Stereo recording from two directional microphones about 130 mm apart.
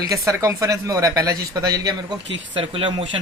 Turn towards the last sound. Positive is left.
turn(degrees=-40)  # may be behind; listen again after turning